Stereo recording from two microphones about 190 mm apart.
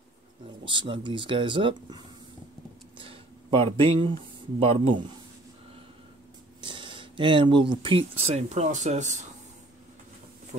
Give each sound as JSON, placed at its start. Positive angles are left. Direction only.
{"t": 0.7, "sound": "speech", "side_deg": -25}
{"t": 6.6, "sound": "a sound", "side_deg": -25}
{"t": 8.3, "sound": "speech", "side_deg": -35}